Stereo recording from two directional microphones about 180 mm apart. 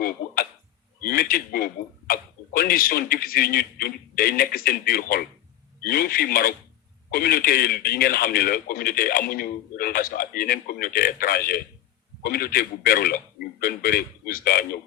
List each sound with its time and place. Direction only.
1.0 s a man's voice: 55° left (ahead or behind)